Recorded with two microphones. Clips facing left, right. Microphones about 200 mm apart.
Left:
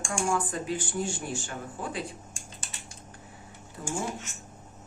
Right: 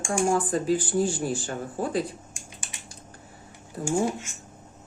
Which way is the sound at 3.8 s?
35° right (ahead or behind).